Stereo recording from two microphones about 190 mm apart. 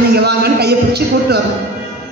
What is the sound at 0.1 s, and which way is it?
A woman's voice, 60° right (ahead or behind).